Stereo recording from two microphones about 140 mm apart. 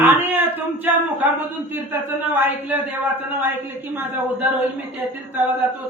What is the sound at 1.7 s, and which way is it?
A man's voice, 15° right (ahead or behind).